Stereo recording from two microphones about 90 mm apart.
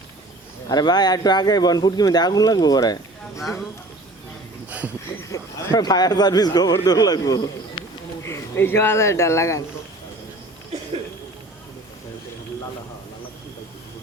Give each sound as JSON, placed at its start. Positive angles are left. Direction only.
{"t": 0.7, "sound": "speech", "side_deg": 50}
{"t": 5.3, "sound": "speech", "side_deg": 35}
{"t": 5.7, "sound": "a man's voice", "side_deg": 50}
{"t": 8.2, "sound": "speech", "side_deg": 25}